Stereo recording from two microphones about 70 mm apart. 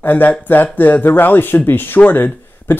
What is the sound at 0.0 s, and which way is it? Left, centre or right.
Speech, left.